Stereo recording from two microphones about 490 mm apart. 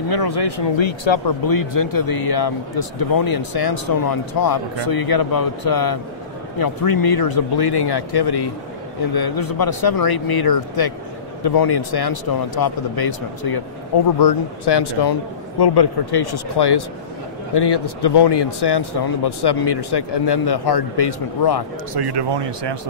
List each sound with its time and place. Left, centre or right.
0.1 s speech: left
1.4 s speech: left
21.9 s speech: right